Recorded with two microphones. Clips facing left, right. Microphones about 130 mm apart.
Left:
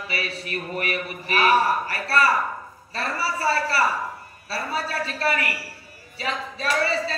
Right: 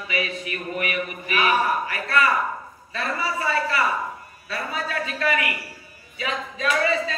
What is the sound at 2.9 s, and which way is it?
Speech, 35° left (ahead or behind).